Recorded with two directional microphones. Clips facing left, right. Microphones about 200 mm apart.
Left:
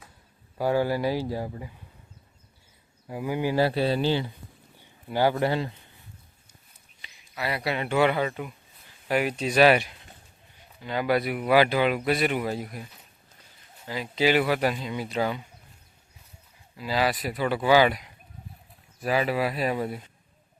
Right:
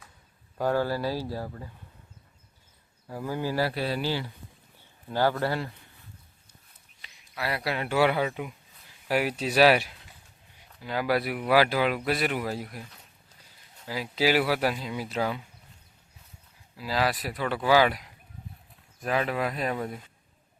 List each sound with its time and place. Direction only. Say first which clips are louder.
0.6 s speech: left 2 dB; 15° left (ahead or behind)
3.1 s speech: left 3 dB; 15° left (ahead or behind)
7.0 s speech: left 1 dB; centre (ahead or behind)
16.7 s speech: left 2 dB; centre (ahead or behind)